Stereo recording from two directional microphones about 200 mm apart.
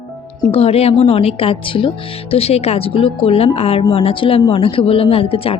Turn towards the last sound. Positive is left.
turn(degrees=30)  # may be behind; listen again after turning